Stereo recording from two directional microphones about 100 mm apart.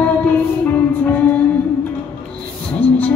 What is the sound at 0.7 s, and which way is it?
Music, 15° left (ahead or behind).